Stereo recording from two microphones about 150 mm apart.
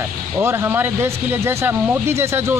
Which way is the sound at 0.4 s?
15° right (ahead or behind).